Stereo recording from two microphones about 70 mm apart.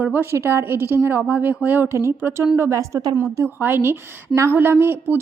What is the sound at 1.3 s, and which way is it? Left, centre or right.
Speech, right.